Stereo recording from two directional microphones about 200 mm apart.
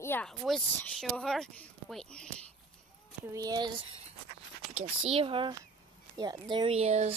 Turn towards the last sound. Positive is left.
turn(degrees=-30)  # may be behind; listen again after turning